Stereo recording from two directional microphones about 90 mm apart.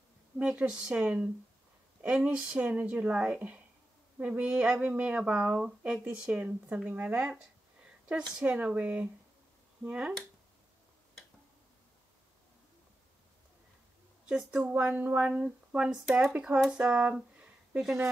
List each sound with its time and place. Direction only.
0.4 s speech: 10° right (ahead or behind)
14.2 s speech: 10° right (ahead or behind)